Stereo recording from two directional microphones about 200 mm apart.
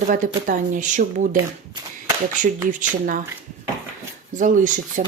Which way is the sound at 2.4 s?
40° right (ahead or behind).